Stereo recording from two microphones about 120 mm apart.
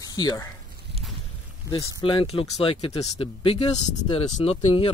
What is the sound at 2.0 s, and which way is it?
Speech, 45° left (ahead or behind).